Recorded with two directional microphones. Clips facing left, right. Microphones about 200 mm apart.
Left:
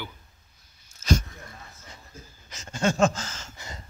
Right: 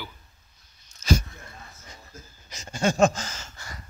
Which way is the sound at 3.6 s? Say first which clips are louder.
Left 1 dB; 25° left (ahead or behind).